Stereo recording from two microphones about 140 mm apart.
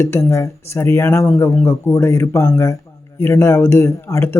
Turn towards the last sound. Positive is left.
turn(degrees=20)  # may be behind; listen again after turning